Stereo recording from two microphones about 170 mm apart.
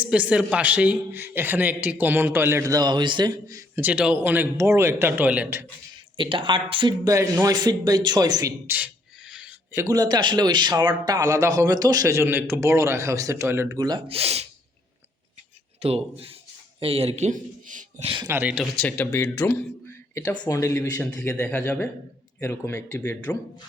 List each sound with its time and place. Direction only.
0.0 s a man's voice: 5° right (ahead or behind)
6.1 s speech: 30° right (ahead or behind); by 9.5 s 5° right (ahead or behind)
9.7 s speech: 20° right (ahead or behind)
14.2 s speech: 35° right (ahead or behind)
15.8 s a man's voice: 35° right (ahead or behind)
18.3 s a man's voice: 10° right (ahead or behind)
18.8 s speech: 10° left (ahead or behind)